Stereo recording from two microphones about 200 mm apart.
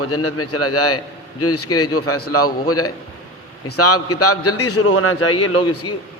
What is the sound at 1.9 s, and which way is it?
Speech, 90° left.